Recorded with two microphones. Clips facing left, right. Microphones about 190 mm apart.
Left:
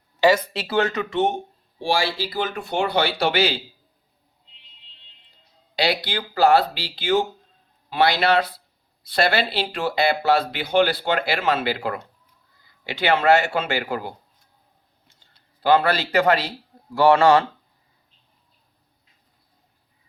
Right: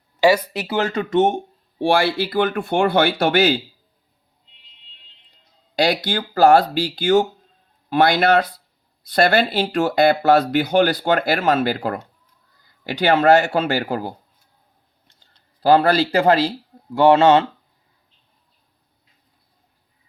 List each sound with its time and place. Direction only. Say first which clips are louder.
0.2 s speech: right 2 dB; 10° right (ahead or behind)
0.8 s speech: even; 30° right (ahead or behind)
1.1 s speech: right 5 dB; 45° right (ahead or behind)
5.7 s speech: right 4 dB; 45° right (ahead or behind)
15.6 s speech: right 4 dB; 35° right (ahead or behind)